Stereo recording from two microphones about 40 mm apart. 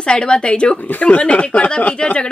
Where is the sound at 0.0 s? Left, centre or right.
Left.